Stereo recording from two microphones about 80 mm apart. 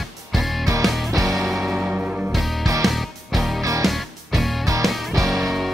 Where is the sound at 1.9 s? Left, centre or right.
Centre.